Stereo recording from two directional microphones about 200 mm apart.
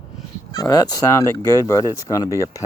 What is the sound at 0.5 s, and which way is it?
Speech, 20° left (ahead or behind).